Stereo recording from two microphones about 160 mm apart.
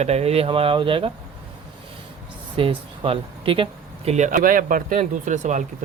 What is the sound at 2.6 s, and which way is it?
Speech, 35° right (ahead or behind).